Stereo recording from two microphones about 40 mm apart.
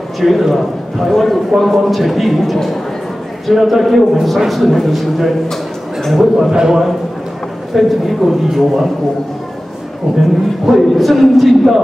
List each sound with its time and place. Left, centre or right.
0.2 s a man's voice: centre
6.5 s a man's voice: centre
7.7 s a man's voice: centre
10.1 s speech: centre
10.6 s a man's voice: centre